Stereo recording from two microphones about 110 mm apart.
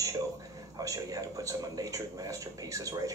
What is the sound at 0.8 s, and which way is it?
Speech, 30° right (ahead or behind).